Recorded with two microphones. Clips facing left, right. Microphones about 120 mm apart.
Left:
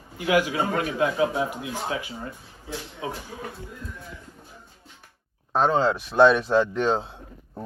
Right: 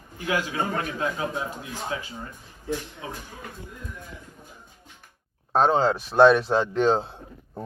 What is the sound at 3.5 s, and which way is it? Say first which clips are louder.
Speech: left 1 dB; 15° right (ahead or behind).